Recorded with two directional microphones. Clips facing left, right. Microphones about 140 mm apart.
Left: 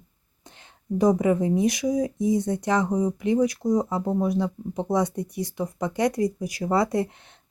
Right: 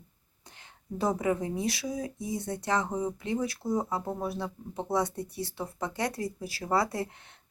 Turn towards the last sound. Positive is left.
turn(degrees=20)  # may be behind; listen again after turning